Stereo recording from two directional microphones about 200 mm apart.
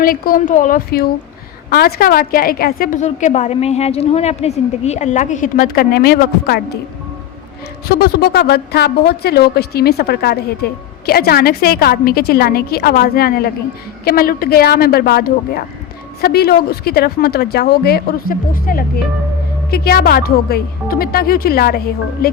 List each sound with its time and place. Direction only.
0.0 s a woman's voice: 45° left (ahead or behind)
7.9 s a woman's voice: 50° left (ahead or behind)